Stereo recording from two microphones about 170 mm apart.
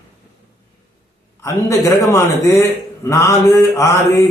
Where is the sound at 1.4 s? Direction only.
20° left (ahead or behind).